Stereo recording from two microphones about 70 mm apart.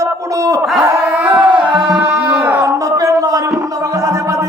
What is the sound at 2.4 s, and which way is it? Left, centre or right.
Speech, right.